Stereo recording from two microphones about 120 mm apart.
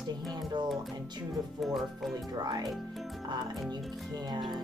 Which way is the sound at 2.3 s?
35° right (ahead or behind).